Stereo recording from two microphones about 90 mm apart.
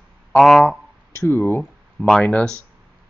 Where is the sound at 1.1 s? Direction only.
30° left (ahead or behind).